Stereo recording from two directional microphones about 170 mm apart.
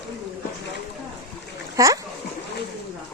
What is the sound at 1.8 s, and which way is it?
Speech, 20° right (ahead or behind).